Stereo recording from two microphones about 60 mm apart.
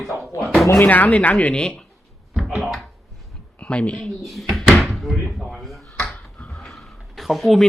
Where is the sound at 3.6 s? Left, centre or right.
Centre.